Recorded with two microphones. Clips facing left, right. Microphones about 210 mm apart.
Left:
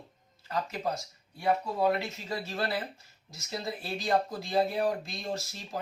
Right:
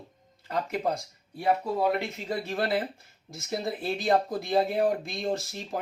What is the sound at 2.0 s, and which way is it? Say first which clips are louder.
Speech: right 4 dB; 55° right (ahead or behind).